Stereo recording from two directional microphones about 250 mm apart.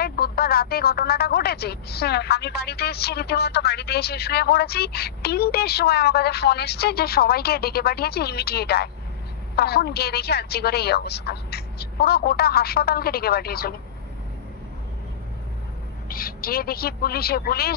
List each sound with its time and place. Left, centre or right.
0.0 s speech: left
16.1 s speech: left